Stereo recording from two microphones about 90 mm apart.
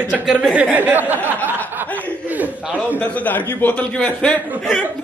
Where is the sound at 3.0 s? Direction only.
20° left (ahead or behind).